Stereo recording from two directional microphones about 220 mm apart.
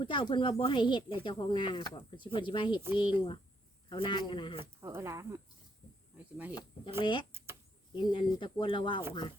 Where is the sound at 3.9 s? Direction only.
20° left (ahead or behind).